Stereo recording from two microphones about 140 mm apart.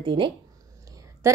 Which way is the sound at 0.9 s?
25° right (ahead or behind).